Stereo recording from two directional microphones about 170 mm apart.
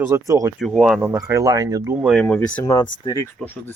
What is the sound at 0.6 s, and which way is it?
Speech, centre (ahead or behind).